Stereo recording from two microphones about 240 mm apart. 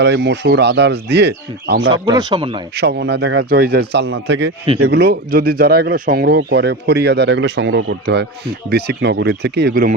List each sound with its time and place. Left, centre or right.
0.0 s speech: right
1.9 s speech: centre
2.7 s speech: right